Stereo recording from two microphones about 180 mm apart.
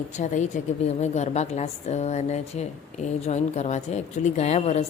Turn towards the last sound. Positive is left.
turn(degrees=35)  # may be behind; listen again after turning